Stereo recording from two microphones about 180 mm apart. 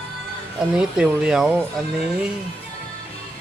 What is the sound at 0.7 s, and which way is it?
Speech, 5° right (ahead or behind).